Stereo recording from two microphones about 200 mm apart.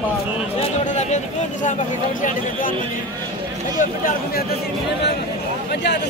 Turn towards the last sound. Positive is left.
turn(degrees=55)  # may be behind; listen again after turning